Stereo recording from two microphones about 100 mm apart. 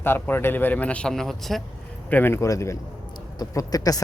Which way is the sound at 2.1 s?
20° left (ahead or behind).